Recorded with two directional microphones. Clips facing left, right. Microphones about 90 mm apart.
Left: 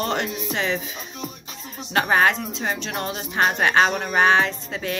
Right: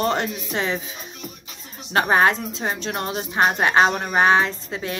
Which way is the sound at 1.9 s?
30° right (ahead or behind).